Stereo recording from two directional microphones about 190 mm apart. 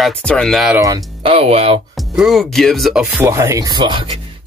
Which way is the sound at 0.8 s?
25° right (ahead or behind).